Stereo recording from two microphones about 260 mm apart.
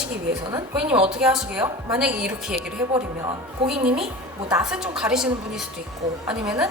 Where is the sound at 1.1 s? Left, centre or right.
Centre.